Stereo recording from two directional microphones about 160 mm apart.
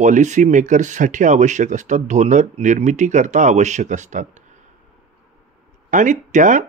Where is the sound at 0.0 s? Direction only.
50° right (ahead or behind).